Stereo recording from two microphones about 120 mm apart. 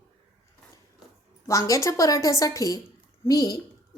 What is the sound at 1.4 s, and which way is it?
A woman's voice, 25° left (ahead or behind).